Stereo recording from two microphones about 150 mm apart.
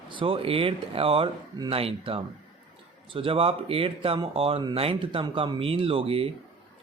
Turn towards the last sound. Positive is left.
turn(degrees=-40)  # may be behind; listen again after turning